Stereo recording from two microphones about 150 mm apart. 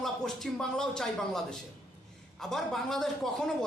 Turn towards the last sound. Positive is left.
turn(degrees=0)  # may be behind; listen again after turning